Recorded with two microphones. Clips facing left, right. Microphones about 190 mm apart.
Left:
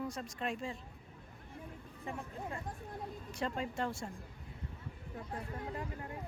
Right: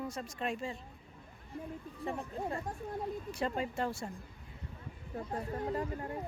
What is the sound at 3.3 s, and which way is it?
Speech, 10° right (ahead or behind).